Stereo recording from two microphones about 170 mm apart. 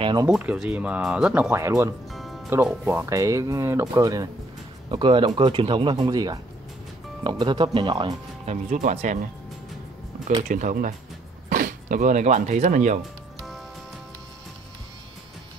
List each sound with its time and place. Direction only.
0.0 s speech: 25° right (ahead or behind)
0.3 s speech: 5° right (ahead or behind)
2.0 s music: centre (ahead or behind)
2.5 s speech: 10° right (ahead or behind); by 8.2 s 25° right (ahead or behind)
8.5 s speech: 45° right (ahead or behind)
10.5 s speech: 50° right (ahead or behind)